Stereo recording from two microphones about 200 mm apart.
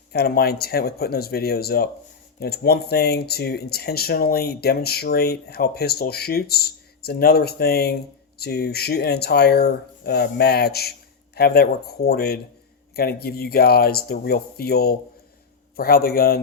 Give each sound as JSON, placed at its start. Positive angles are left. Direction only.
{"t": 0.1, "sound": "speech", "side_deg": 50}